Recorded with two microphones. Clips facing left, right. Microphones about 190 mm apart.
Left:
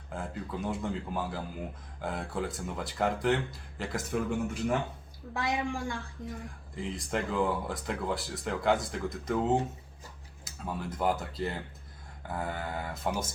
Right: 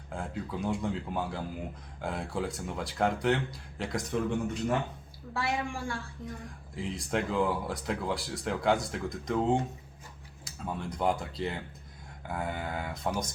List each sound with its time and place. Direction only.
0.1 s speech: centre (ahead or behind)
5.3 s a woman's voice: 15° left (ahead or behind)
6.7 s speech: centre (ahead or behind)